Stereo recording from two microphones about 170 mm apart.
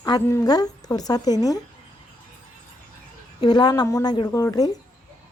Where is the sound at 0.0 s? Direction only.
20° left (ahead or behind).